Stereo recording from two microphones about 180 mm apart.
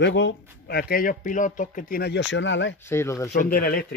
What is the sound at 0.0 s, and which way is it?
Speech, 90° left.